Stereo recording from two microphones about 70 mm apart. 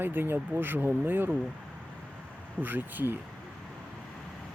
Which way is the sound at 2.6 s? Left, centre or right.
Right.